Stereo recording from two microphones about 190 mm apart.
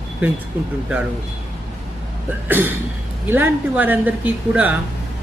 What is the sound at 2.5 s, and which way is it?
Speech, 10° right (ahead or behind).